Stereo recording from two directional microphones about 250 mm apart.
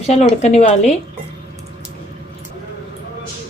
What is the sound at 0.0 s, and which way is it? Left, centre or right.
Speech, left.